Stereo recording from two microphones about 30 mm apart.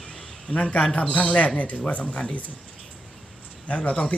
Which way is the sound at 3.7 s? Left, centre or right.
Left.